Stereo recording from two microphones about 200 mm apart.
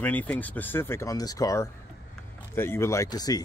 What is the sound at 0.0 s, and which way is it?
Speech, 10° left (ahead or behind).